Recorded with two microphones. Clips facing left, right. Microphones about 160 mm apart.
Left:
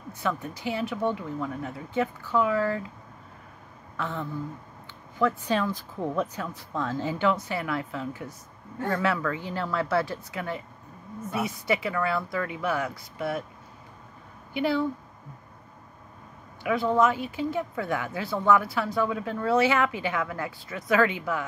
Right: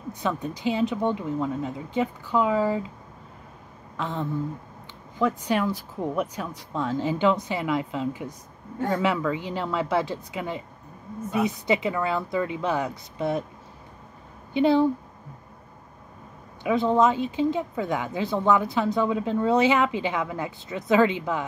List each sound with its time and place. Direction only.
0.1 s a woman's voice: 20° right (ahead or behind)
3.9 s speech: 15° right (ahead or behind)
5.4 s a woman's voice: 10° right (ahead or behind)
14.5 s speech: 20° right (ahead or behind)
16.6 s speech: 20° right (ahead or behind)